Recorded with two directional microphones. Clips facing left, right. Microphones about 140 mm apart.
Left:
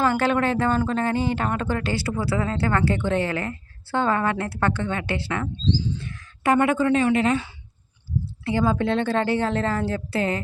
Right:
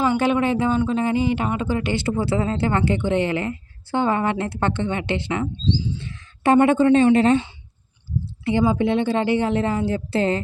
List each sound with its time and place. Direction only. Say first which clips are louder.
0.0 s a woman's voice: right 2 dB; 15° right (ahead or behind)
8.4 s speech: right 3 dB; 15° right (ahead or behind)
10.1 s speech: right 5 dB; 30° right (ahead or behind)